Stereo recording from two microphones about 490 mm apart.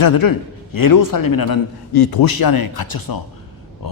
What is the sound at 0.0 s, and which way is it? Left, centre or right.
A woman's voice, left.